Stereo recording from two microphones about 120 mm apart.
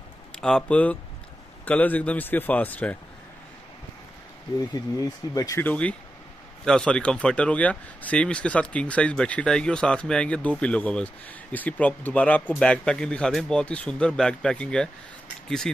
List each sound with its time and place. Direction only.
0.4 s speech: 5° left (ahead or behind)
5.0 s speech: 30° left (ahead or behind)
5.6 s speech: 10° left (ahead or behind)